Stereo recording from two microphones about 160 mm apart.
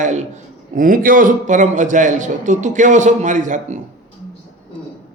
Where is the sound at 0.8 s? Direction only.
60° right (ahead or behind).